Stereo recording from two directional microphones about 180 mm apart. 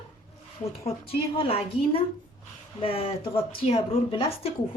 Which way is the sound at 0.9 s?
30° left (ahead or behind).